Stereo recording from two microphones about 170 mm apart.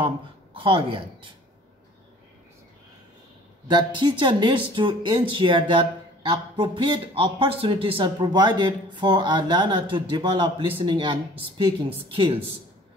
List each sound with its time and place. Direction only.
0.6 s speech: 30° right (ahead or behind)
3.6 s speech: 25° right (ahead or behind)